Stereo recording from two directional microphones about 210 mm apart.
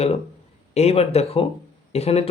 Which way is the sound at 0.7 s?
30° left (ahead or behind).